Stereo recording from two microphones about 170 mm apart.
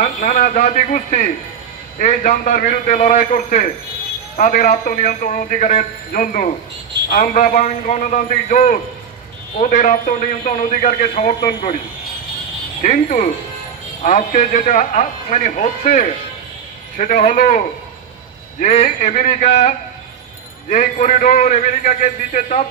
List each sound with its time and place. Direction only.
0.0 s a man's voice: 50° left (ahead or behind)
12.8 s a man's voice: 50° left (ahead or behind)